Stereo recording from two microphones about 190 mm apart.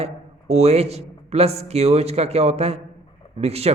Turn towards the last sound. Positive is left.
turn(degrees=-35)  # may be behind; listen again after turning